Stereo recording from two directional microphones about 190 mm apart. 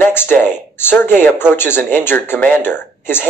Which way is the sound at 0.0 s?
10° left (ahead or behind).